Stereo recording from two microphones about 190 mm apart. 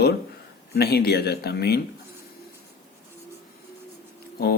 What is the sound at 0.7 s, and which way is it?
Speech, 55° left (ahead or behind).